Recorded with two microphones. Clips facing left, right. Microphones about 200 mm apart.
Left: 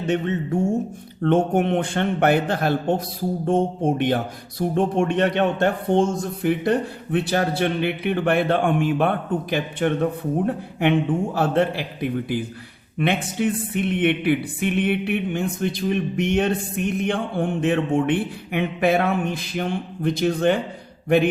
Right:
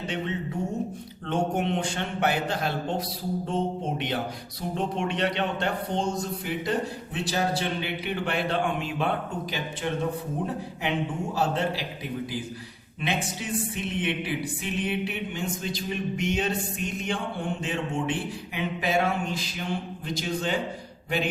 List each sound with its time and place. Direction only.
0.1 s speech: 50° left (ahead or behind)